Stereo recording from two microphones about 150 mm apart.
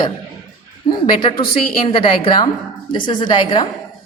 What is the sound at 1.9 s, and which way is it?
A woman's voice, 35° left (ahead or behind).